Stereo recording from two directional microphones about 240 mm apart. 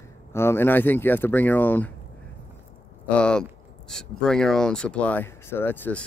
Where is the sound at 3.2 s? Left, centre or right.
Centre.